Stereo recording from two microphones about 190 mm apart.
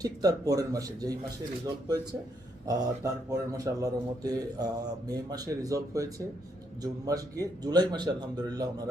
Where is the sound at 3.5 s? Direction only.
20° right (ahead or behind).